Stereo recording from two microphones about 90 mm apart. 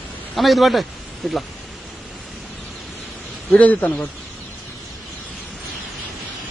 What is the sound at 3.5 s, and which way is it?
Speech, 15° left (ahead or behind).